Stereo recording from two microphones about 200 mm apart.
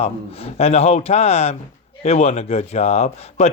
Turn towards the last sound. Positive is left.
turn(degrees=35)  # may be behind; listen again after turning